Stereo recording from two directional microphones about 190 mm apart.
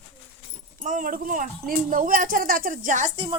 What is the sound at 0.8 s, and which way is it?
Speech, 45° right (ahead or behind).